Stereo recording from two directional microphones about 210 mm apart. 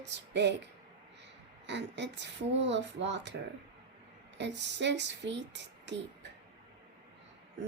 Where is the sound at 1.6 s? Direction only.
55° right (ahead or behind).